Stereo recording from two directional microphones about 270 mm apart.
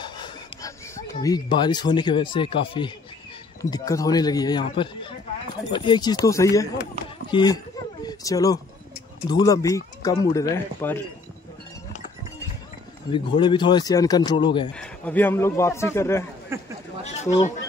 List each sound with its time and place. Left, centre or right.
0.0 s a sound: centre
3.7 s speech: centre
13.1 s speech: centre
14.8 s speech: centre
16.5 s speech: centre
17.0 s speech: left